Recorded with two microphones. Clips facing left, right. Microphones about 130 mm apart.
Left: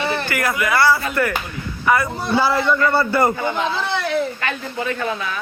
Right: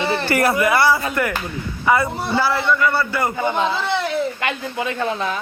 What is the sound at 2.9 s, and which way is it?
Speech, 30° left (ahead or behind).